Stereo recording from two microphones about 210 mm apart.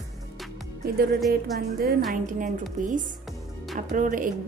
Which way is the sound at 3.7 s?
40° right (ahead or behind).